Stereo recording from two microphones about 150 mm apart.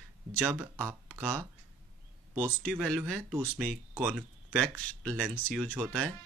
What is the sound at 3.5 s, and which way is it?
Speech, 10° right (ahead or behind).